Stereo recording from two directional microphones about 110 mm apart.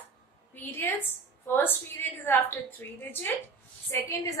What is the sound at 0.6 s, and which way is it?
A woman's voice, 20° left (ahead or behind).